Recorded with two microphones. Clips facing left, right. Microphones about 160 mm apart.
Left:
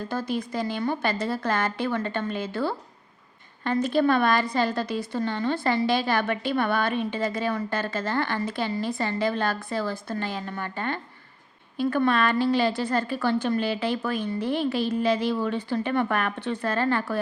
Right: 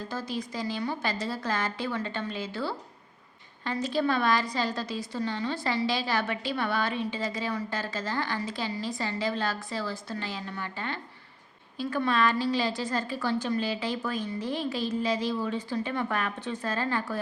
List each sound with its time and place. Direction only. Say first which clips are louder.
0.1 s a woman's voice: left 7 dB; 55° left (ahead or behind)